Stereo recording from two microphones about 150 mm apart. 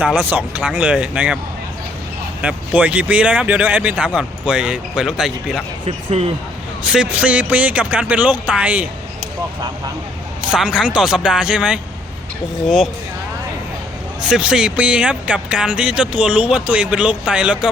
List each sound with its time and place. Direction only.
0.0 s speech: 10° right (ahead or behind)
2.4 s speech: 10° right (ahead or behind)
6.1 s speech: 40° right (ahead or behind)
6.8 s speech: 5° right (ahead or behind)
10.5 s speech: 5° right (ahead or behind)
14.2 s speech: 5° right (ahead or behind)